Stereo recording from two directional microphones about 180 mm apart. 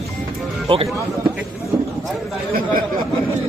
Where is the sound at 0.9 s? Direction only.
15° right (ahead or behind).